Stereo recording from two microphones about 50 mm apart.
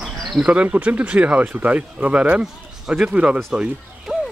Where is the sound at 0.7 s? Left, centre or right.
Right.